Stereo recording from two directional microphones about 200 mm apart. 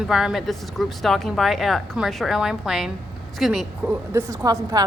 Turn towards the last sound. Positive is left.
turn(degrees=-15)  # may be behind; listen again after turning